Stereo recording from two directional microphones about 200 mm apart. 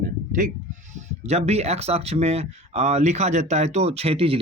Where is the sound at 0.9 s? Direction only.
30° right (ahead or behind).